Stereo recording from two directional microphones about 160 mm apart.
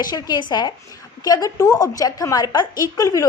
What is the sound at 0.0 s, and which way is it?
A woman's voice, 25° left (ahead or behind).